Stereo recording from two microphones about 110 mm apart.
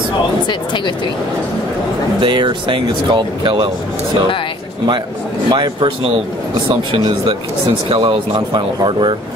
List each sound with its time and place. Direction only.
2.1 s speech: 45° right (ahead or behind)
5.5 s speech: 45° right (ahead or behind)